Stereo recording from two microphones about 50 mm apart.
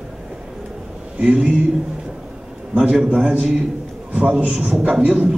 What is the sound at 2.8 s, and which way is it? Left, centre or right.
A man's voice, centre.